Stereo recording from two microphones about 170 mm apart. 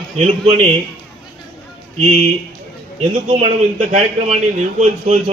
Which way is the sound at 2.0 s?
45° right (ahead or behind).